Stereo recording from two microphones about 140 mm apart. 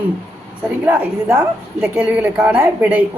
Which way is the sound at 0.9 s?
10° right (ahead or behind).